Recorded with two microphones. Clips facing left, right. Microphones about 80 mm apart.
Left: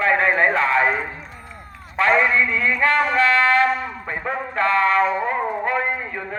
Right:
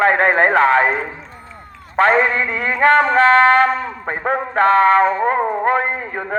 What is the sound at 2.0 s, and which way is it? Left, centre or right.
Music, right.